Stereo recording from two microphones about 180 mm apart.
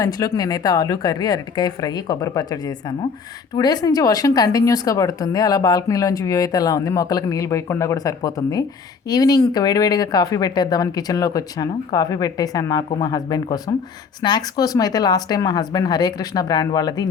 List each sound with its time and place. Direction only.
0.0 s a woman's voice: 20° left (ahead or behind)